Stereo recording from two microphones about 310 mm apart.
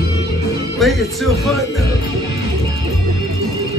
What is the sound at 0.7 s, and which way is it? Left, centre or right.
Speech, centre.